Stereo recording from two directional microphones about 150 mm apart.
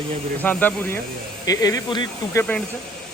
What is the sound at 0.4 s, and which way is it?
Speech, 10° left (ahead or behind).